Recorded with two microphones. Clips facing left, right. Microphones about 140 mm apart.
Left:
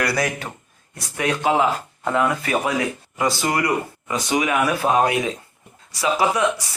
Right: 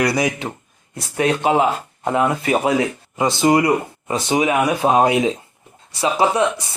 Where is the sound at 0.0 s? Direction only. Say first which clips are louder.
Right 4 dB; 20° right (ahead or behind).